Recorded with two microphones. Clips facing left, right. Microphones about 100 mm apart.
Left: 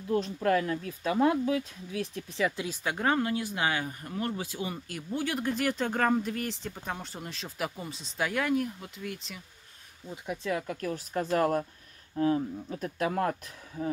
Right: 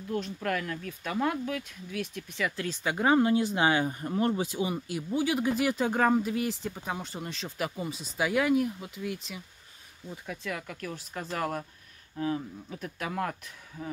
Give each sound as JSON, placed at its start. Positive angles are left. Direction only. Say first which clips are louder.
{"t": 0.1, "sound": "speech", "louder": "left 5 dB", "side_deg": 30}
{"t": 2.5, "sound": "speech", "louder": "right 1 dB", "side_deg": 10}
{"t": 2.8, "sound": "speech", "louder": "right 3 dB", "side_deg": -5}
{"t": 3.2, "sound": "speech", "louder": "right 5 dB", "side_deg": -25}
{"t": 10.1, "sound": "speech", "louder": "left 5 dB", "side_deg": 25}